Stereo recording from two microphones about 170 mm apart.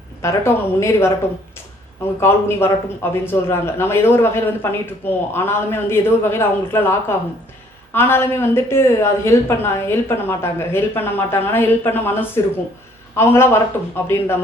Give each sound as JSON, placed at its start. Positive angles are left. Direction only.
{"t": 0.2, "sound": "a man's voice", "side_deg": 15}
{"t": 2.2, "sound": "a man's voice", "side_deg": 15}